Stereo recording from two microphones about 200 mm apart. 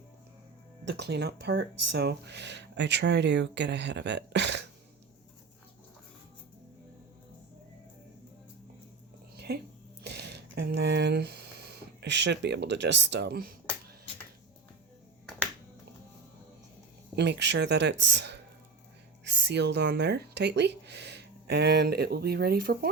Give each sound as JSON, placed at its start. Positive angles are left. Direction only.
{"t": 0.9, "sound": "speech", "side_deg": -55}
{"t": 10.0, "sound": "a sound", "side_deg": -55}
{"t": 17.2, "sound": "speech", "side_deg": -60}